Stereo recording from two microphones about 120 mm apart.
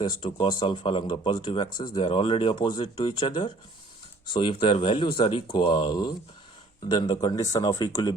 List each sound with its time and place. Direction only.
0.0 s speech: 40° left (ahead or behind)